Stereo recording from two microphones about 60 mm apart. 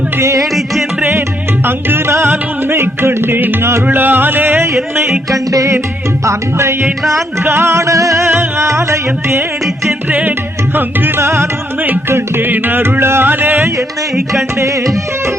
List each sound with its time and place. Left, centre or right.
0.2 s music: right
0.5 s music: centre
1.6 s music: right
3.8 s music: right
5.3 s music: right
6.2 s music: right
10.1 s music: right